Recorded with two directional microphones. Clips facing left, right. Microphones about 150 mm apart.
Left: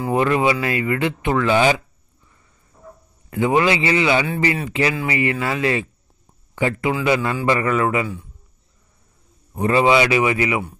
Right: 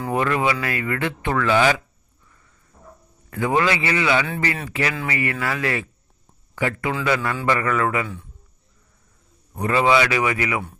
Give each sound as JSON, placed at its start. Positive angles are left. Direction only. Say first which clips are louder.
{"t": 0.1, "sound": "speech", "louder": "left 3 dB", "side_deg": 25}
{"t": 3.3, "sound": "speech", "louder": "left 3 dB", "side_deg": 20}
{"t": 9.6, "sound": "speech", "louder": "left 3 dB", "side_deg": 25}